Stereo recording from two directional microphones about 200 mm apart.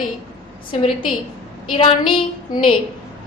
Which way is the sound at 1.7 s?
25° left (ahead or behind).